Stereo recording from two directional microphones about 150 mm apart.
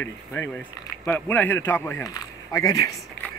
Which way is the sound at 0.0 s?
10° left (ahead or behind).